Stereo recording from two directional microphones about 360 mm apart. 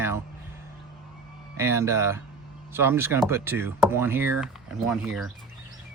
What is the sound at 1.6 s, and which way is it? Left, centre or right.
Speech, centre.